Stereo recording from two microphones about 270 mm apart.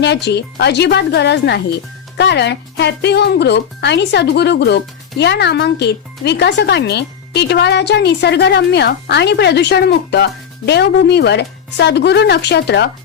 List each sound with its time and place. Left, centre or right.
0.0 s speech: left